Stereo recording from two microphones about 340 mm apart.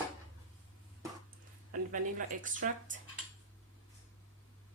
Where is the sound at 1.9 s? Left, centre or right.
Right.